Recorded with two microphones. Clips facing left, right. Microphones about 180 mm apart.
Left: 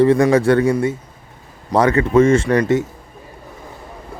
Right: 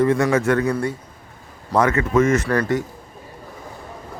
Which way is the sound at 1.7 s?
30° left (ahead or behind).